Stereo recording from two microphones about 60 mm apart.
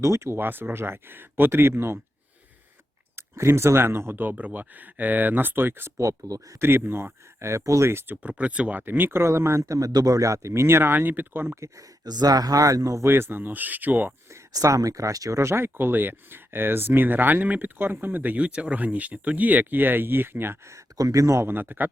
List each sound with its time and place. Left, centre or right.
0.0 s speech: right
0.3 s speech: right
3.2 s speech: right
6.0 s speech: right
6.6 s speech: right
7.9 s speech: right
8.3 s speech: right
8.8 s speech: right
11.5 s speech: right
13.1 s speech: right
14.5 s speech: right
20.7 s speech: right
21.4 s speech: right